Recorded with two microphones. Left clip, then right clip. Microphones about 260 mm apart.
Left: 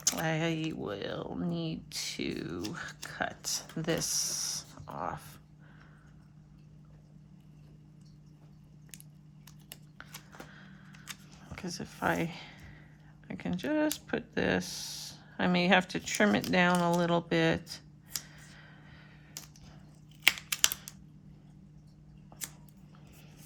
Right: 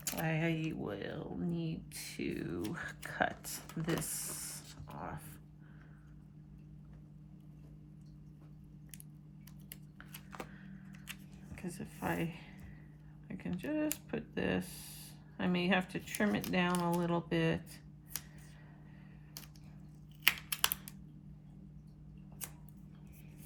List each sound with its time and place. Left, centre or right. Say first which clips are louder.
0.0 s speech: left 6 dB; centre
10.5 s a sound: left 3 dB; centre
13.2 s speech: left 6 dB; left
20.2 s computer keyboard: left 5 dB; centre